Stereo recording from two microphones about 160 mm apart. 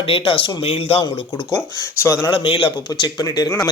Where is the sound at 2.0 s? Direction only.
15° left (ahead or behind).